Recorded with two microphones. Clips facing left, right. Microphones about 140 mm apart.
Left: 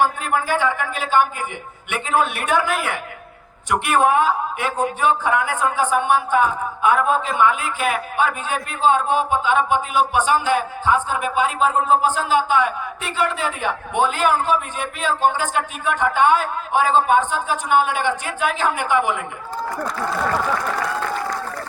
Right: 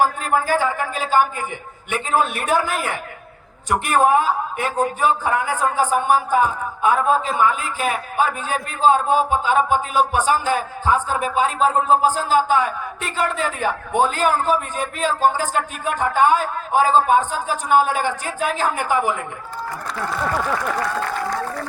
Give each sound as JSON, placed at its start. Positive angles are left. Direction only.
{"t": 0.0, "sound": "a man's voice", "side_deg": -40}
{"t": 3.7, "sound": "a man's voice", "side_deg": -35}